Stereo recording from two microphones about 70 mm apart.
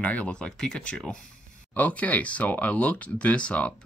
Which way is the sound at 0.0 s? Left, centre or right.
Centre.